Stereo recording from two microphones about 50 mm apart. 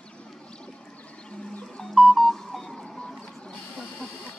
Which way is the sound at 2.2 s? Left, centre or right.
Centre.